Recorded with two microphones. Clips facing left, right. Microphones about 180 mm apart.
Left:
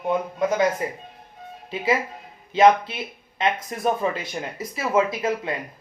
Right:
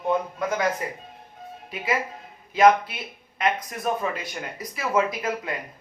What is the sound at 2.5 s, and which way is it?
Speech, 25° left (ahead or behind).